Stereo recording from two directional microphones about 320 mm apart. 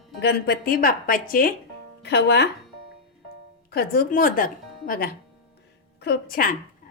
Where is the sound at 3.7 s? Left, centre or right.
Left.